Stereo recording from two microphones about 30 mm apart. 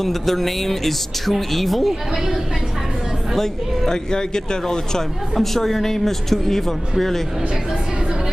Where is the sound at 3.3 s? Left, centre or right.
Centre.